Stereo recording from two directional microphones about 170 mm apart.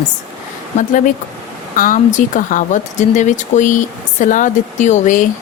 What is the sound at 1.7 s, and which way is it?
Speech, 50° left (ahead or behind).